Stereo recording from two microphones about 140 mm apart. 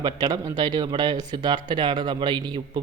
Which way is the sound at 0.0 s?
30° right (ahead or behind).